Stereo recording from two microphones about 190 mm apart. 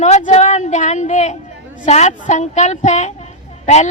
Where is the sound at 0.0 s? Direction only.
40° left (ahead or behind).